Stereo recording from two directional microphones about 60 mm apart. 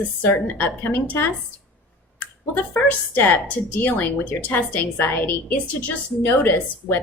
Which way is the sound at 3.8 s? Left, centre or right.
Left.